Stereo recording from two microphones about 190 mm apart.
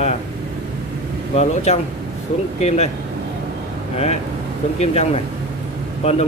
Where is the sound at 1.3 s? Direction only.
35° left (ahead or behind).